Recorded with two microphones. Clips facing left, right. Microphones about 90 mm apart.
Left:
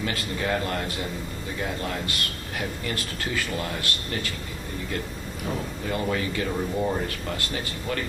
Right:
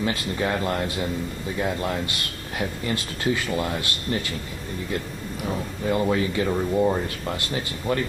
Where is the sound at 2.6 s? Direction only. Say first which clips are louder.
Right 4 dB; 20° right (ahead or behind).